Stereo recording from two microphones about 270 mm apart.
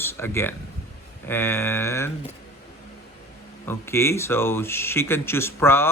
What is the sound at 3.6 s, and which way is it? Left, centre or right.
Speech, centre.